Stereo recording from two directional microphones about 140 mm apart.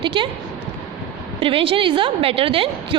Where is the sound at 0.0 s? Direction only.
35° right (ahead or behind).